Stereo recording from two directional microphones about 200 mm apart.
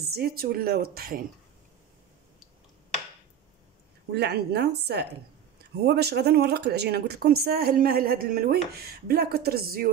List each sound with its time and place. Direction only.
0.0 s speech: 50° right (ahead or behind)
4.1 s speech: 55° right (ahead or behind)